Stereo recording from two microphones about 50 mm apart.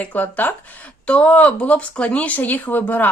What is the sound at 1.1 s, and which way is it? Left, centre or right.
Speech, left.